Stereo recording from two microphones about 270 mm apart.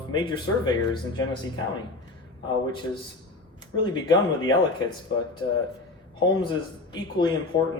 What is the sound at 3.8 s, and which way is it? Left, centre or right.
Speech, centre.